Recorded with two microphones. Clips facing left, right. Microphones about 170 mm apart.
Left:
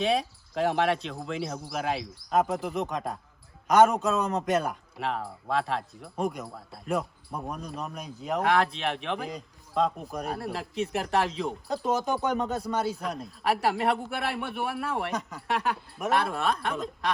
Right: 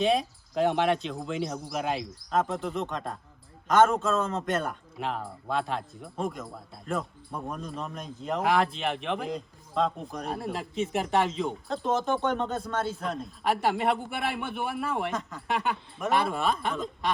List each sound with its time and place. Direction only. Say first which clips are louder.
0.0 s a man's voice: right 1 dB; centre (ahead or behind)